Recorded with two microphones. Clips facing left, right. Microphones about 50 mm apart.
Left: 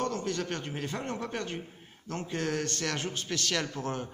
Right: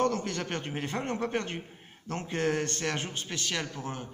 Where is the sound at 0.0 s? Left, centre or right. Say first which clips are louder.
Right 3 dB; right.